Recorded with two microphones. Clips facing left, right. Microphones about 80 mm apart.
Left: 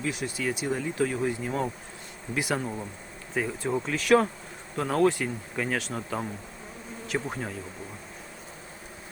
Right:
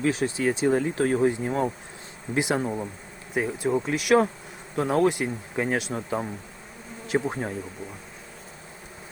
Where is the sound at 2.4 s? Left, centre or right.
Right.